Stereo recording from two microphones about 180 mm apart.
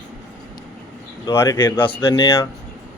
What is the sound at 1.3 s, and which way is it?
Speech, 20° left (ahead or behind).